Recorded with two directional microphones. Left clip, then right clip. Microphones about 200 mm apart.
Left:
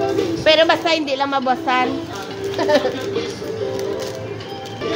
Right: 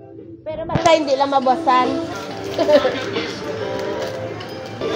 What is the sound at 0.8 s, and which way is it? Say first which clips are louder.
Speech: right 4 dB; 35° left (ahead or behind).